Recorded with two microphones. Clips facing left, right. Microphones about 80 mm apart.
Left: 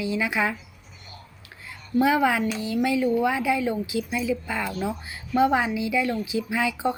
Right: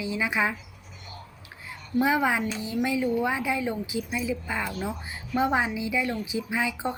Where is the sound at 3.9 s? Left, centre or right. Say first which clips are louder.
Left 3 dB; left.